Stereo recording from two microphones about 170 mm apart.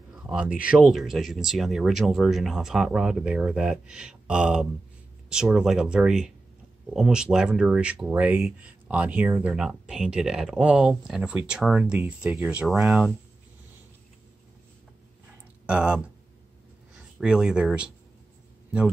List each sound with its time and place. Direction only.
0.3 s speech: 5° right (ahead or behind)
15.6 s speech: 5° right (ahead or behind)
17.2 s speech: 5° right (ahead or behind)